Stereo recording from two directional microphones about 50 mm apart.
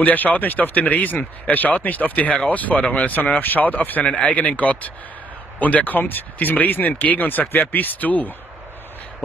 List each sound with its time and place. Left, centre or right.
0.0 s speech: left
3.1 s speech: left
4.0 s speech: left